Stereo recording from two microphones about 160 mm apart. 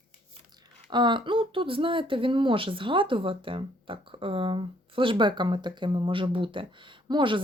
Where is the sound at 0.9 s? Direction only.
30° right (ahead or behind).